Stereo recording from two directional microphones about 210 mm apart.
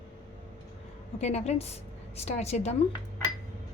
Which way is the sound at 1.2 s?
30° left (ahead or behind).